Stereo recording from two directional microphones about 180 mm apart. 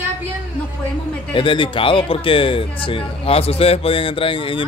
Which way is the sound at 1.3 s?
30° left (ahead or behind).